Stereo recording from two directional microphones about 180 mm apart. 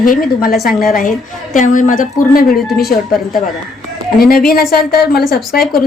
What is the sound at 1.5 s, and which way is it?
A woman's voice, 45° left (ahead or behind).